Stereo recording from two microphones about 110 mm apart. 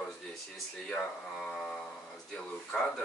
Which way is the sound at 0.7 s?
5° left (ahead or behind).